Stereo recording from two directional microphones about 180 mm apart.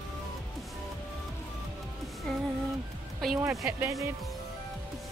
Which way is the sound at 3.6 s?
15° right (ahead or behind).